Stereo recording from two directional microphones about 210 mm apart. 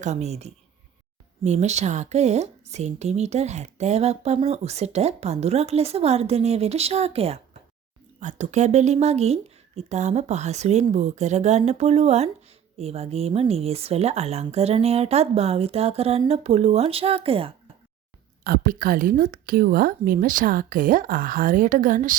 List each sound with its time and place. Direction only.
0.0 s speech: 35° right (ahead or behind)
18.4 s speech: 40° right (ahead or behind)